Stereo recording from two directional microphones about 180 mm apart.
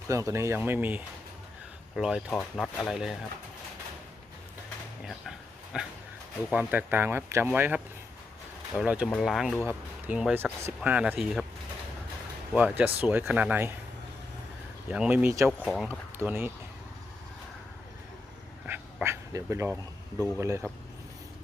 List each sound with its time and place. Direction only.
0.1 s speech: 15° right (ahead or behind)
5.0 s dog: 5° right (ahead or behind)
6.5 s speech: 10° right (ahead or behind)
8.8 s speech: 5° right (ahead or behind)
12.5 s speech: 10° right (ahead or behind)
14.8 s speech: 5° right (ahead or behind)
15.4 s speech: centre (ahead or behind)
16.1 s speech: 10° right (ahead or behind)
18.6 s dog: 10° right (ahead or behind)
20.4 s speech: 15° right (ahead or behind)